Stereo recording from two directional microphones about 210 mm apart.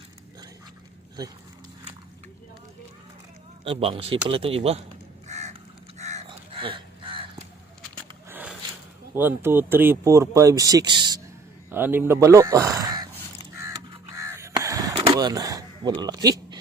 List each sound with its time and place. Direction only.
3.6 s speech: 25° right (ahead or behind)
5.3 s crow: 35° right (ahead or behind)
8.3 s a sound: 10° right (ahead or behind)
9.1 s speech: 10° right (ahead or behind)
11.7 s speech: 10° right (ahead or behind)
14.2 s a sound: 15° right (ahead or behind)